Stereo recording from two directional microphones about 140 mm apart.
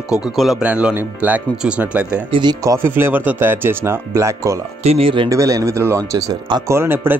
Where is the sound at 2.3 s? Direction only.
30° right (ahead or behind).